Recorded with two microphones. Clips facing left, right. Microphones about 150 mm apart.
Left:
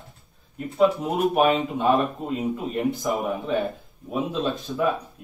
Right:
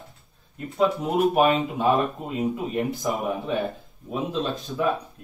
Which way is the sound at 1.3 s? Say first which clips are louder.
Even; centre (ahead or behind).